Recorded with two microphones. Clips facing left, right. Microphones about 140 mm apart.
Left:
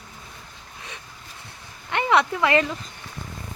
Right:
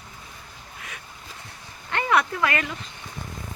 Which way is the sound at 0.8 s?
30° left (ahead or behind).